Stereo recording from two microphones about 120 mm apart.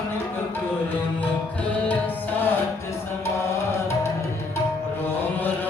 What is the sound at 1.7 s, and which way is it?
Tabla, 15° left (ahead or behind).